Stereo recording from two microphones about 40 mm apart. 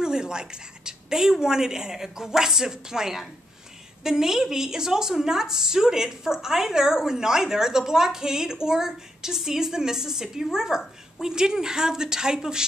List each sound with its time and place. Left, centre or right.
0.0 s a woman's voice: centre